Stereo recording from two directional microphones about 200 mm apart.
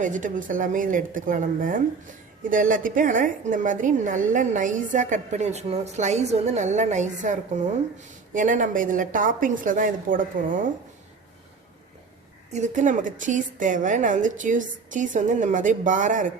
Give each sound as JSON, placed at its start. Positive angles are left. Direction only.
{"t": 0.0, "sound": "a woman's voice", "side_deg": -40}
{"t": 12.5, "sound": "a woman's voice", "side_deg": -40}